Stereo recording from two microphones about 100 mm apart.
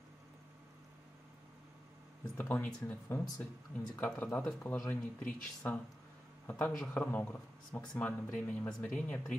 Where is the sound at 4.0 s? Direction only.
15° left (ahead or behind).